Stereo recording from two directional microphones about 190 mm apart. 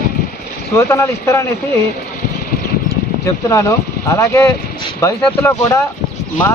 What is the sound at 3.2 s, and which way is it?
Speech, 15° left (ahead or behind).